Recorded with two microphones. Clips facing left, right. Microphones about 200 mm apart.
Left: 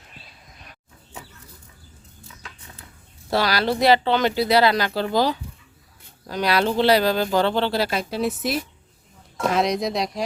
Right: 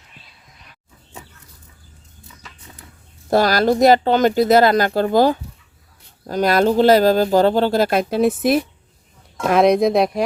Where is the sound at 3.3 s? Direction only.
45° right (ahead or behind).